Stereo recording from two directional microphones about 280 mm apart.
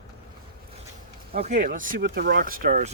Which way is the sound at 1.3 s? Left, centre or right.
Right.